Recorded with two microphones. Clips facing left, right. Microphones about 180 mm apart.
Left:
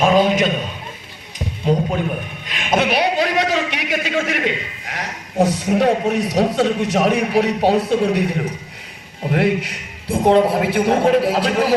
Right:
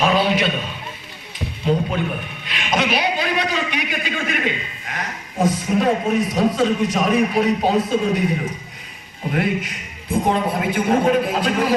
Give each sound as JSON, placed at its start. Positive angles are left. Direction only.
{"t": 0.0, "sound": "a sound", "side_deg": 45}
{"t": 1.6, "sound": "a man's voice", "side_deg": 20}
{"t": 2.5, "sound": "a man's voice", "side_deg": 50}